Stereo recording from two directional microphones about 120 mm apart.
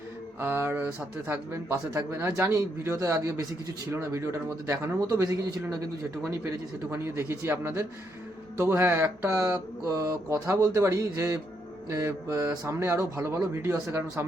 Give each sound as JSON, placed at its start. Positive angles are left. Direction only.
{"t": 0.3, "sound": "speech", "side_deg": -20}